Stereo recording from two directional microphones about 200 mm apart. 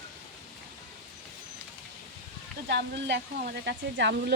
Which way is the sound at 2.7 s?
60° right (ahead or behind).